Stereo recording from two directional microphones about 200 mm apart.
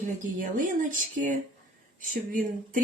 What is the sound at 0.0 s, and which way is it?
Speech, 40° right (ahead or behind).